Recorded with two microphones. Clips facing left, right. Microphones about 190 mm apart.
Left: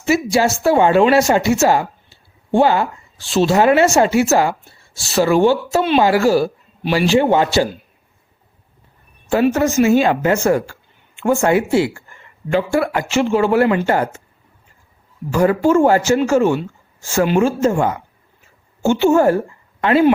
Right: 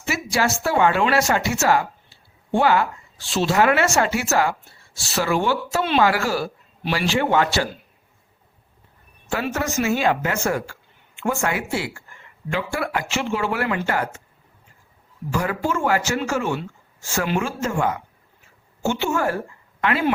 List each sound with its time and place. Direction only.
0.0 s speech: 25° left (ahead or behind)
9.3 s speech: 25° left (ahead or behind)
15.3 s a man's voice: 35° left (ahead or behind)